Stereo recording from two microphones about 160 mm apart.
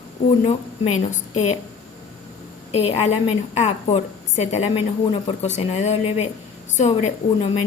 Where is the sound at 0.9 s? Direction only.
45° left (ahead or behind).